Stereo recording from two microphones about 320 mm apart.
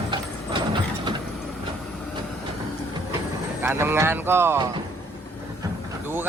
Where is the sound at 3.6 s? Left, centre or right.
Centre.